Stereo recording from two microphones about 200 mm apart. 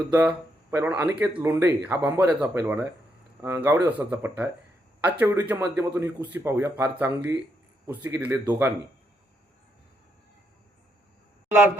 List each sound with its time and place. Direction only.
0.1 s speech: 10° right (ahead or behind)